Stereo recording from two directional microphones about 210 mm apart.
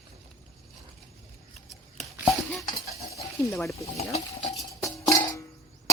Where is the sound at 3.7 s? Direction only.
30° left (ahead or behind).